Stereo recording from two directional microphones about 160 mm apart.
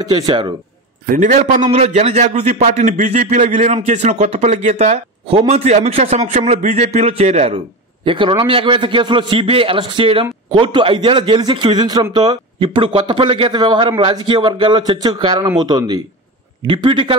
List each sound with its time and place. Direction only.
0.1 s a man's voice: 25° right (ahead or behind)
1.0 s a man's voice: 55° right (ahead or behind)
8.0 s a man's voice: 30° right (ahead or behind)